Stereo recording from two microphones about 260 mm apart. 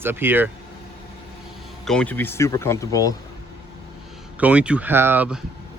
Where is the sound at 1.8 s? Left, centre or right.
Centre.